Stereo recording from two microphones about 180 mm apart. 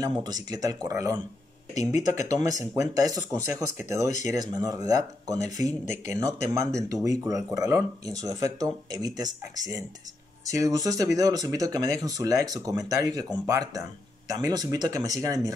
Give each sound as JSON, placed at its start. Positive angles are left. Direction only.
{"t": 0.2, "sound": "speech", "side_deg": -20}
{"t": 2.2, "sound": "speech", "side_deg": -20}